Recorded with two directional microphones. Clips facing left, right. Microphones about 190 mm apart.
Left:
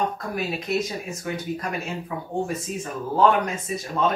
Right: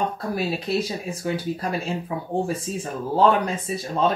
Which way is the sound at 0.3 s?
30° right (ahead or behind).